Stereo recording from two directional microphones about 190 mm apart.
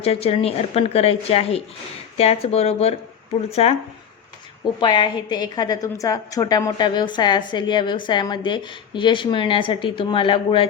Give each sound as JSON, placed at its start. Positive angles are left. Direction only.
{"t": 0.0, "sound": "speech", "side_deg": 30}
{"t": 4.8, "sound": "a woman's voice", "side_deg": 25}